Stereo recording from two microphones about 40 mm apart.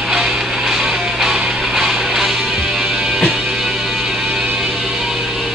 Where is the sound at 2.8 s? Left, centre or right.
Right.